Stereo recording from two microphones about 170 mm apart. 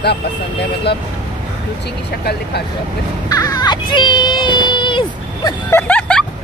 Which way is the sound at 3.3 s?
20° left (ahead or behind).